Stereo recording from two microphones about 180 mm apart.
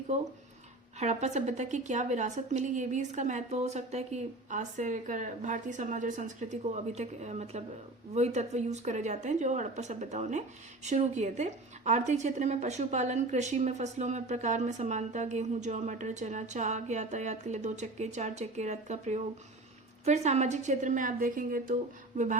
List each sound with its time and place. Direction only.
0.1 s a woman's voice: 40° right (ahead or behind)